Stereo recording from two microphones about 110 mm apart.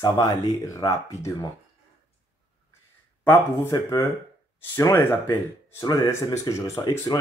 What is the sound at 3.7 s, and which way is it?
Speech, 45° left (ahead or behind).